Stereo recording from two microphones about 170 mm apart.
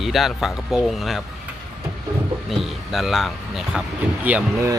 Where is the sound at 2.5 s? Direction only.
Centre (ahead or behind).